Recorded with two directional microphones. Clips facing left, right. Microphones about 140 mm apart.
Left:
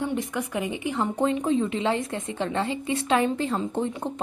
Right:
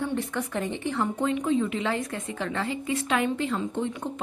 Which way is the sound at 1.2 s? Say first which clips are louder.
Left 2 dB; 35° left (ahead or behind).